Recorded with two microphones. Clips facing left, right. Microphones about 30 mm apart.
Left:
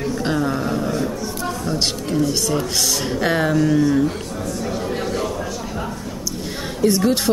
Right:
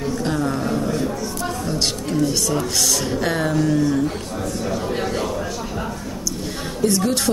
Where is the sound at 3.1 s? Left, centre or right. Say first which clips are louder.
Left 2 dB; centre.